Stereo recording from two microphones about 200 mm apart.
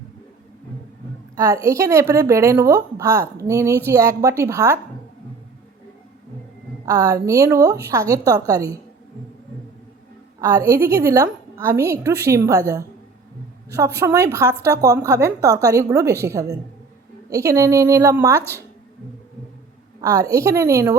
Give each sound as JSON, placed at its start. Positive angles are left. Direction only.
{"t": 1.4, "sound": "a woman's voice", "side_deg": -15}
{"t": 6.8, "sound": "a woman's voice", "side_deg": -15}
{"t": 10.4, "sound": "a woman's voice", "side_deg": -15}
{"t": 20.0, "sound": "a woman's voice", "side_deg": -15}